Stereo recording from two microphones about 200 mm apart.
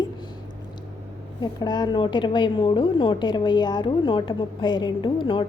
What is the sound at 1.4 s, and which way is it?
Speech, 20° left (ahead or behind).